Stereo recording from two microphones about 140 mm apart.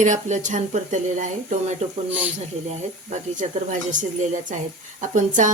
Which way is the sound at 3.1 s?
65° right (ahead or behind).